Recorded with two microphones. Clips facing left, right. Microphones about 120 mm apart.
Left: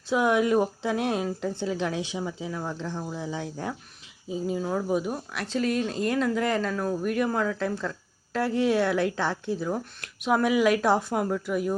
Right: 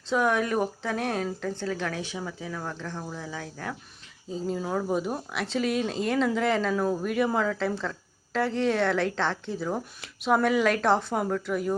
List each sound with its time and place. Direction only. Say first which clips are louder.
0.1 s speech: left 2 dB; 15° left (ahead or behind)
4.3 s speech: left 1 dB; 10° left (ahead or behind)